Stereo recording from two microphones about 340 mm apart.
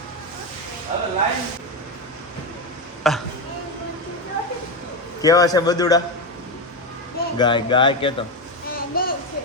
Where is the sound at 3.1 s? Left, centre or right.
Centre.